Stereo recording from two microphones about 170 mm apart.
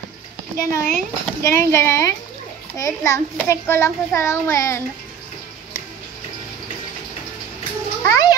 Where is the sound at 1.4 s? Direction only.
15° left (ahead or behind).